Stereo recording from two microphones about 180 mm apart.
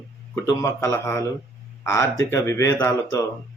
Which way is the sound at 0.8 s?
15° left (ahead or behind).